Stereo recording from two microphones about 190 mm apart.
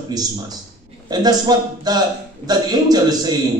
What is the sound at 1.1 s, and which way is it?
A man's voice, 20° right (ahead or behind).